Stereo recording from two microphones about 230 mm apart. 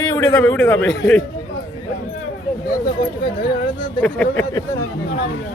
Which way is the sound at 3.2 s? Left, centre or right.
Left.